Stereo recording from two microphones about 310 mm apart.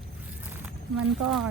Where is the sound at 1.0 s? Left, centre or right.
Centre.